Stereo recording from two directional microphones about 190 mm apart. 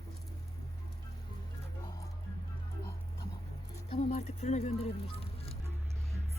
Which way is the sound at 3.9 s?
35° left (ahead or behind).